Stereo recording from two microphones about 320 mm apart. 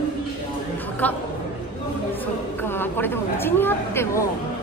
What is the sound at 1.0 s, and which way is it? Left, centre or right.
Speech, centre.